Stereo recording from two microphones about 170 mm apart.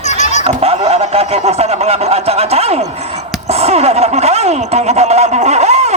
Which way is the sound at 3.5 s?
35° right (ahead or behind).